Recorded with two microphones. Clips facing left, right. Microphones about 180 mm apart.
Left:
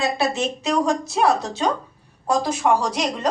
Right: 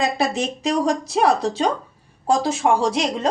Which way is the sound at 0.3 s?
35° right (ahead or behind).